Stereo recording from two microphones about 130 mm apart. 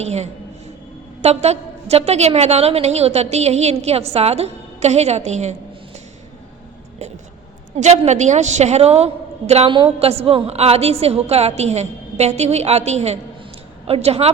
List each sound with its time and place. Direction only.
0.0 s a woman's voice: 55° right (ahead or behind)
7.8 s a woman's voice: 60° right (ahead or behind)
9.6 s a woman's voice: 40° right (ahead or behind)